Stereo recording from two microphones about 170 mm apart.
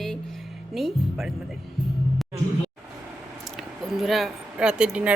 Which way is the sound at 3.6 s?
Centre (ahead or behind).